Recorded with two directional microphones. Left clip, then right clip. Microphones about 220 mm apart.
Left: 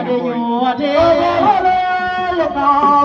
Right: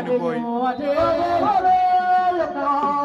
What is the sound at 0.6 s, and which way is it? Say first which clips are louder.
Music: left 7 dB; 40° left (ahead or behind).